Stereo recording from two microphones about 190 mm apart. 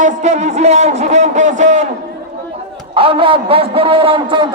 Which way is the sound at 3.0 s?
30° right (ahead or behind).